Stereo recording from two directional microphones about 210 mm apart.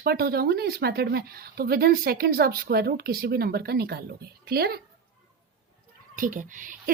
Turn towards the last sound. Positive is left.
turn(degrees=-40)  # may be behind; listen again after turning